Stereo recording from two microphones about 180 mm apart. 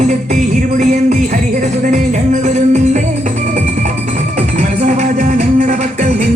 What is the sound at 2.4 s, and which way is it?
Music, 40° right (ahead or behind).